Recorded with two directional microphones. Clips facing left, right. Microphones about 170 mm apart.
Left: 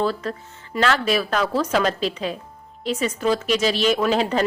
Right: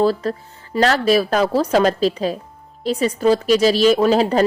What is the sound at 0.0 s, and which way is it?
Speech, 35° right (ahead or behind).